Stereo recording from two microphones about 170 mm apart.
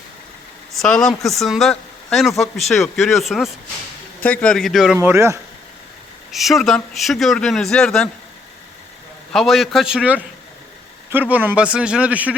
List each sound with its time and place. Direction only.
0.7 s a man's voice: centre (ahead or behind)
4.9 s speech: 15° right (ahead or behind)
6.3 s a man's voice: centre (ahead or behind)
9.3 s a man's voice: centre (ahead or behind)